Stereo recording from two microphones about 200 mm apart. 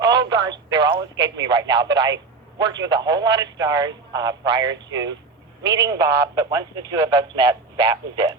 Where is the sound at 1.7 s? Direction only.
60° right (ahead or behind).